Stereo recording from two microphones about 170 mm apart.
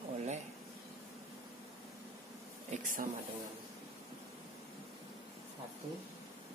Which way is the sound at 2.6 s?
45° right (ahead or behind).